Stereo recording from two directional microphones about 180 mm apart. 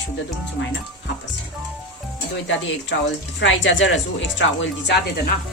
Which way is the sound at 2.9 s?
85° left.